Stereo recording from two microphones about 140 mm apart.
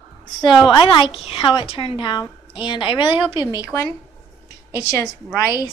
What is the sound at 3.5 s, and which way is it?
Speech, 20° left (ahead or behind).